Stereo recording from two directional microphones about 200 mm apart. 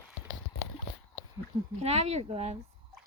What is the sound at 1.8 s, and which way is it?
Speech, 30° right (ahead or behind).